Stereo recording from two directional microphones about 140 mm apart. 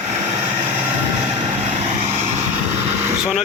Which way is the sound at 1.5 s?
55° right (ahead or behind).